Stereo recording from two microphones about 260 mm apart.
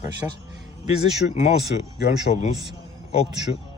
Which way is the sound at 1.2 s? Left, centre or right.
Left.